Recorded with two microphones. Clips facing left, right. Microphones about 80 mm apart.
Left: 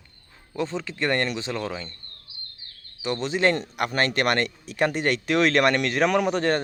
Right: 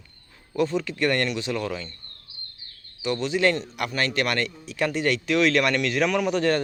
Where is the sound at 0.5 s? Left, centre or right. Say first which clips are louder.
Right 4 dB; left.